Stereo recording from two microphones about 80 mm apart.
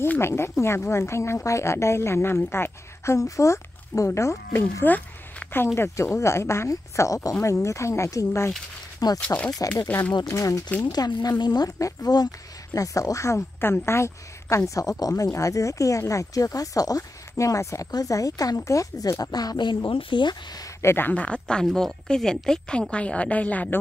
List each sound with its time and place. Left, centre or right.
0.0 s speech: left
4.8 s a sound: left
5.8 s speech: left
9.0 s speech: left
10.8 s speech: left
20.8 s speech: left
21.1 s speech: centre